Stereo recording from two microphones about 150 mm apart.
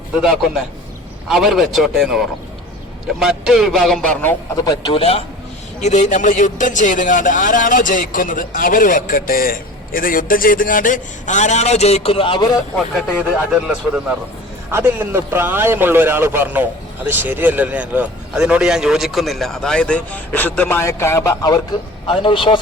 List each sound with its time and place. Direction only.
0.2 s a man's voice: 5° right (ahead or behind)
4.5 s a man's voice: 25° left (ahead or behind)
5.8 s speech: 50° left (ahead or behind); by 12.5 s 35° left (ahead or behind)
13.5 s a man's voice: 5° right (ahead or behind); by 22.5 s 35° left (ahead or behind)